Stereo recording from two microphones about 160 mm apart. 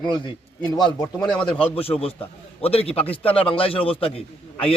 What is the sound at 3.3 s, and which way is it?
A man's voice, 35° left (ahead or behind).